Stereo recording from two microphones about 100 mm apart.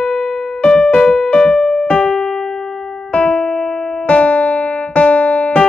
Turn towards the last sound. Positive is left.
turn(degrees=10)  # may be behind; listen again after turning